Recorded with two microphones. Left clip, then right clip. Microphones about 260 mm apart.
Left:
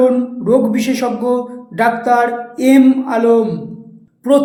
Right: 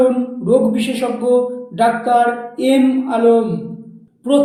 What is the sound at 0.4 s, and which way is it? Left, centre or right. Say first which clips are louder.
Music: left 1 dB; left.